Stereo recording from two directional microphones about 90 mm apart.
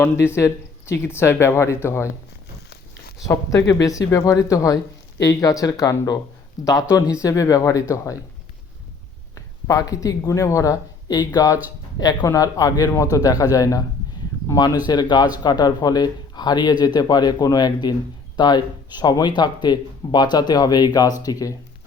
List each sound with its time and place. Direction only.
0.0 s speech: 30° left (ahead or behind)
3.2 s a man's voice: 35° left (ahead or behind)
9.3 s a man's voice: 40° left (ahead or behind)